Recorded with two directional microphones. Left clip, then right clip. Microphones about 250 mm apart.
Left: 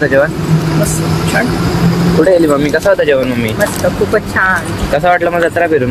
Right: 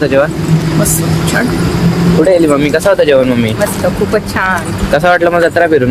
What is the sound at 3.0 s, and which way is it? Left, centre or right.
Speech, right.